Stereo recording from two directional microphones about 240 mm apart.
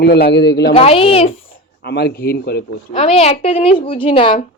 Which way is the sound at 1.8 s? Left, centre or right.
Left.